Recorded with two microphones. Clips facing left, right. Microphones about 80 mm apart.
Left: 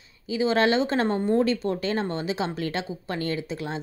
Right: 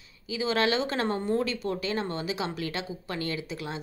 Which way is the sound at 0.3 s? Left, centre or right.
Left.